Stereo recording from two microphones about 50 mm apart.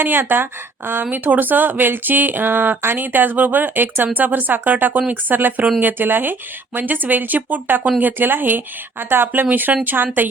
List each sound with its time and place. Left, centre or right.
0.0 s speech: right